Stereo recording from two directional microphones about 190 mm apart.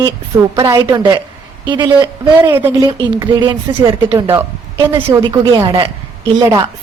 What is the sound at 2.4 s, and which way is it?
A woman's voice, 15° right (ahead or behind).